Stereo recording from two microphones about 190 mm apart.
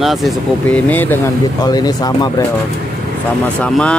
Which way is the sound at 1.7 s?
20° left (ahead or behind).